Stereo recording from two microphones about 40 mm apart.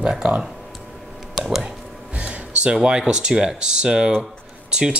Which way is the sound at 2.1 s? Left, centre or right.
Right.